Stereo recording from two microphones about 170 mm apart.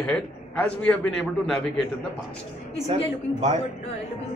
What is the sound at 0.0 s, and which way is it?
A man's voice, 10° left (ahead or behind).